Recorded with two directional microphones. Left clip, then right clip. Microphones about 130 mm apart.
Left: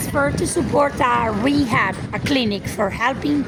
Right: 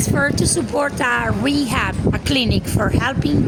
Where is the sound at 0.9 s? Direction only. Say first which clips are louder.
Left 1 dB; 50° right (ahead or behind).